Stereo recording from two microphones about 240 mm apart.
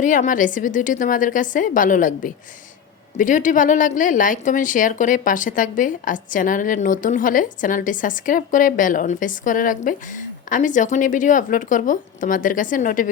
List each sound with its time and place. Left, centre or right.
0.0 s speech: left